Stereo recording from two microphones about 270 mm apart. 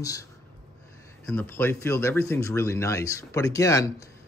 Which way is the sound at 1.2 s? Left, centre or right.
Centre.